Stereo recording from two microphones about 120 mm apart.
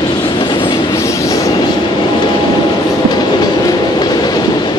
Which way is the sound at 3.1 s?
35° left (ahead or behind).